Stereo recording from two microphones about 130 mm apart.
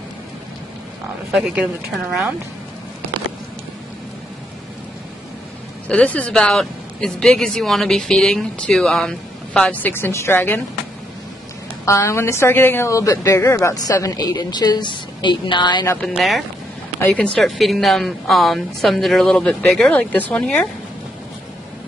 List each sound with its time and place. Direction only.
1.3 s a woman's voice: 10° right (ahead or behind)
5.9 s speech: 10° left (ahead or behind)
11.8 s a woman's voice: 25° left (ahead or behind)
16.2 s a woman's voice: centre (ahead or behind)
17.0 s a woman's voice: 10° left (ahead or behind)